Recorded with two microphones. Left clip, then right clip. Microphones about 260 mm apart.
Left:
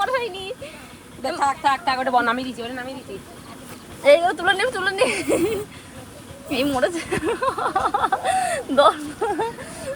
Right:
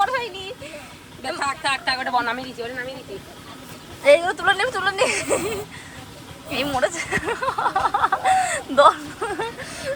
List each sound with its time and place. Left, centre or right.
0.0 s a sound: centre
1.4 s a woman's voice: centre
4.0 s speech: centre